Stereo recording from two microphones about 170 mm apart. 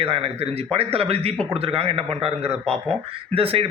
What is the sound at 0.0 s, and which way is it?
A man's voice, 35° right (ahead or behind).